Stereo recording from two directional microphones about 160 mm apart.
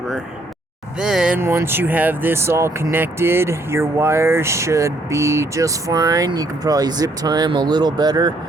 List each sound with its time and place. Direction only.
0.9 s speech: 5° right (ahead or behind); by 8.3 s 25° right (ahead or behind)